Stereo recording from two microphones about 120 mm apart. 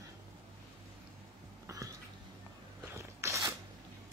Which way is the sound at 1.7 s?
25° right (ahead or behind).